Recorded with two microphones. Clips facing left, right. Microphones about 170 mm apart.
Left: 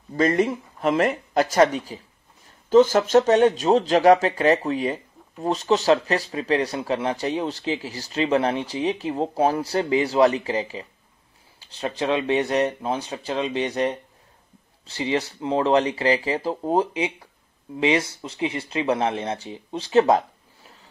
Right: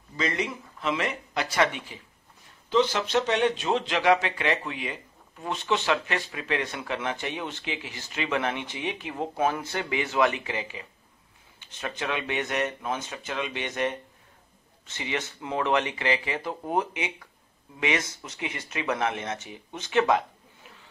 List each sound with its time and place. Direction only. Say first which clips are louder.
0.1 s speech: left 9 dB; 50° left (ahead or behind)